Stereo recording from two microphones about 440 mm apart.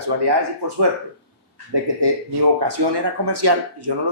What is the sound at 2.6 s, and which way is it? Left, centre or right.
Speech, right.